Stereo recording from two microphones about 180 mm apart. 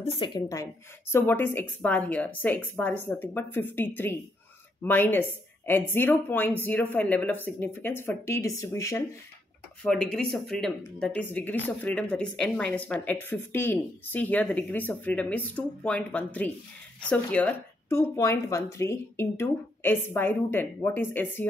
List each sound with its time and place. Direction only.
0.0 s a woman's voice: 30° left (ahead or behind)
9.8 s speech: 5° left (ahead or behind)